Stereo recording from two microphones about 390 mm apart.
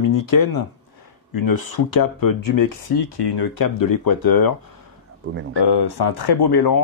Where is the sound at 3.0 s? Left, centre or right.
Left.